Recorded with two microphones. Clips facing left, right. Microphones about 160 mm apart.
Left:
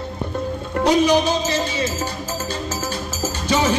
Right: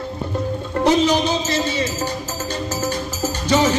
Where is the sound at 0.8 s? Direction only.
10° left (ahead or behind).